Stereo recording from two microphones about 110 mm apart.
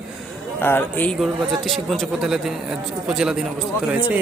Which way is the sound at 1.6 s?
Centre (ahead or behind).